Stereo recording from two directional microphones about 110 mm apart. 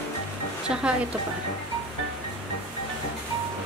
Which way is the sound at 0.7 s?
10° right (ahead or behind).